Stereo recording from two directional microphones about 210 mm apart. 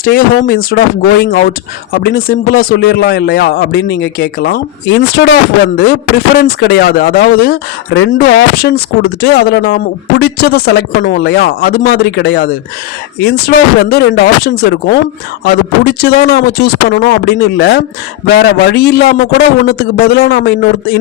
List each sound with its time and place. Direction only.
0.0 s speech: 45° left (ahead or behind)